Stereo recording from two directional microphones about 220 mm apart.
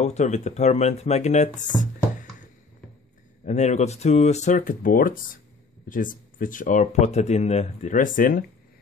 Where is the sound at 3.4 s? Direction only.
30° left (ahead or behind).